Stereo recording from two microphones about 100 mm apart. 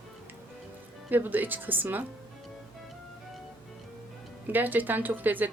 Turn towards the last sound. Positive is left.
turn(degrees=-20)  # may be behind; listen again after turning